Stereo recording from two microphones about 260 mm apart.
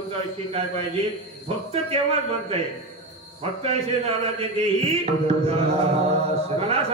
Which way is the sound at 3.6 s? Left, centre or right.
Right.